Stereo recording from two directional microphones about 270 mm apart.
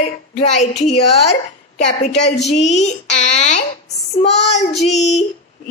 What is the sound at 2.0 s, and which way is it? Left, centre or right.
Speech, left.